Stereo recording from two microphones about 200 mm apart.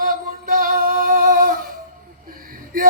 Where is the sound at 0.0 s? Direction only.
45° right (ahead or behind).